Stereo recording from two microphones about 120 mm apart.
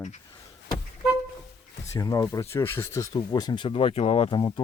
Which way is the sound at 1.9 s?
25° left (ahead or behind).